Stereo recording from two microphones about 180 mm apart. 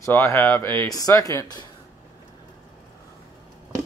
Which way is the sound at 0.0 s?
15° left (ahead or behind).